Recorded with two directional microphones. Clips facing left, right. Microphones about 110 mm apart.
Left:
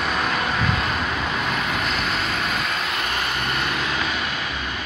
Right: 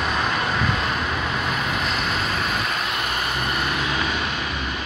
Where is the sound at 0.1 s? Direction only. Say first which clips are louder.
Even; centre (ahead or behind).